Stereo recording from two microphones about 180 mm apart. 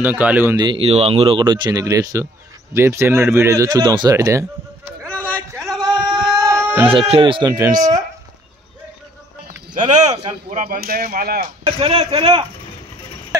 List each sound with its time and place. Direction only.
0.0 s speech: 10° right (ahead or behind)
0.6 s speech: 30° right (ahead or behind)
5.3 s a sound: 15° right (ahead or behind)
6.4 s music: 10° right (ahead or behind)
6.9 s speech: 30° right (ahead or behind)
9.8 s a sound: 40° right (ahead or behind)
10.1 s speech: 45° right (ahead or behind)
11.6 s speech: 35° right (ahead or behind)